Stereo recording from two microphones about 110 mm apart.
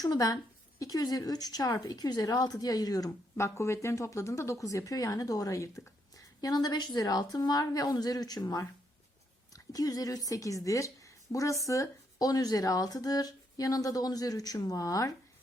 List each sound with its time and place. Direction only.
0.0 s a woman's voice: 35° left (ahead or behind)